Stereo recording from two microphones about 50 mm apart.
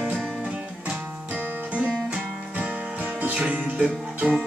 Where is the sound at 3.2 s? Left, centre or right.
Right.